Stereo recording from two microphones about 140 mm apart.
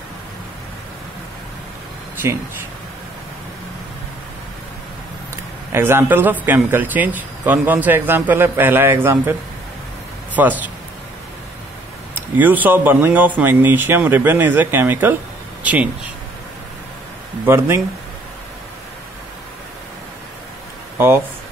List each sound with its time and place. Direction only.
5.3 s a man's voice: 15° right (ahead or behind)
10.3 s speech: 10° right (ahead or behind)
12.4 s a man's voice: 10° right (ahead or behind)
17.5 s a man's voice: 15° right (ahead or behind)